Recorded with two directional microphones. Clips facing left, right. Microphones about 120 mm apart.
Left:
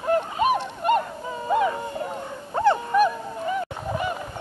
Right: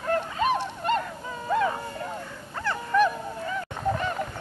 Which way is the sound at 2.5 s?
25° left (ahead or behind).